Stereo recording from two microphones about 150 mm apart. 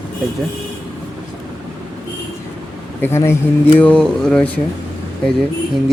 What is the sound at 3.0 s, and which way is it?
Speech, 15° left (ahead or behind).